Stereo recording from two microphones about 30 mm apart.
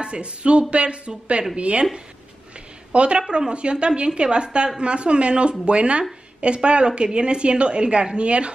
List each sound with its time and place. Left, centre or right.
0.0 s a woman's voice: right
2.9 s a woman's voice: right